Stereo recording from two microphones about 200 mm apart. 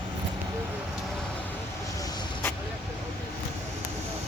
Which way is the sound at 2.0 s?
20° left (ahead or behind).